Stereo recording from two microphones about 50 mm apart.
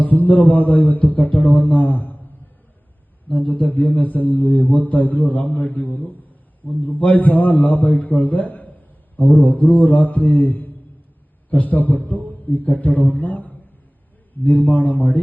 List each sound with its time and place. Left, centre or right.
0.0 s mantra: left
3.2 s mantra: left